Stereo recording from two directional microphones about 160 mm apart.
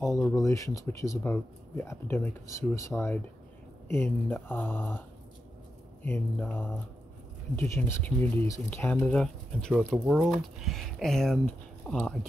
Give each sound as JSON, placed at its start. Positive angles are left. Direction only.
{"t": 0.0, "sound": "speech", "side_deg": 20}
{"t": 3.9, "sound": "speech", "side_deg": 15}
{"t": 6.0, "sound": "speech", "side_deg": 15}
{"t": 7.7, "sound": "speech", "side_deg": 15}